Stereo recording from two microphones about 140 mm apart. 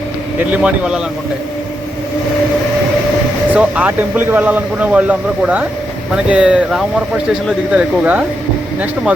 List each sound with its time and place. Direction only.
0.5 s speech: 5° right (ahead or behind)
3.5 s speech: 10° right (ahead or behind)